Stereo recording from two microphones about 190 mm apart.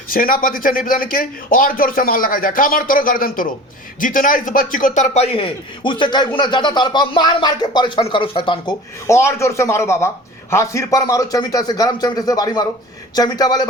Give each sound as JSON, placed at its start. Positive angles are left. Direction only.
{"t": 0.1, "sound": "a man's voice", "side_deg": 45}
{"t": 9.0, "sound": "a man's voice", "side_deg": 15}